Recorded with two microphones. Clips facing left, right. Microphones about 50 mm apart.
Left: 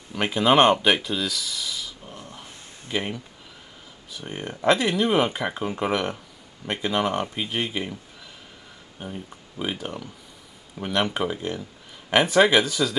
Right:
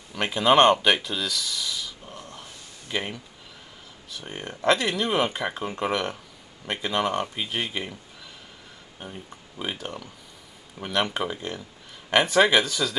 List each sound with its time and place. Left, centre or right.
0.1 s speech: centre
9.0 s speech: centre